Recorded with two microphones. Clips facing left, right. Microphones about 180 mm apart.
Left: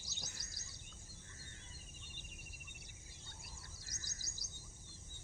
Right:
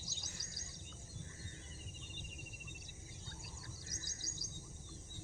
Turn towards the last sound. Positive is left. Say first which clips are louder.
# right 6 dB
turn(degrees=-25)  # may be behind; listen again after turning